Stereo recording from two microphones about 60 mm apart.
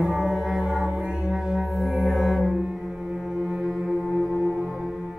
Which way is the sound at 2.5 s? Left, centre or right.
Centre.